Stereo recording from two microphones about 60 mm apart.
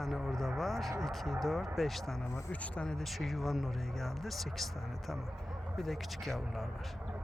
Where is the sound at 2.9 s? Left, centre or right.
Centre.